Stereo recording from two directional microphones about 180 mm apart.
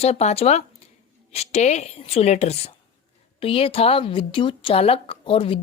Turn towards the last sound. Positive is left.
turn(degrees=30)  # may be behind; listen again after turning